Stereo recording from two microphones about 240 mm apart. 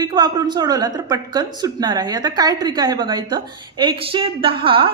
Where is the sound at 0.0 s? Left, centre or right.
Centre.